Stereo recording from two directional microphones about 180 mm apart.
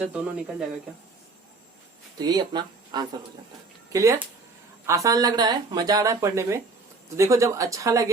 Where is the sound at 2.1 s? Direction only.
25° right (ahead or behind).